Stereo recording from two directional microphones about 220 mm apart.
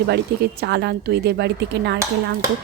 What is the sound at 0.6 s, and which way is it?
Speech, 50° right (ahead or behind).